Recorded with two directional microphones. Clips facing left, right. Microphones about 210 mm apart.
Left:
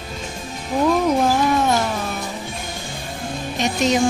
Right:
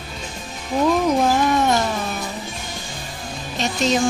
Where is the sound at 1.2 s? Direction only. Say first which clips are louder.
Even; 5° left (ahead or behind).